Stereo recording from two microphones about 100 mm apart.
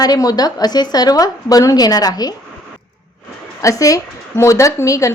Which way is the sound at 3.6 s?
35° left (ahead or behind).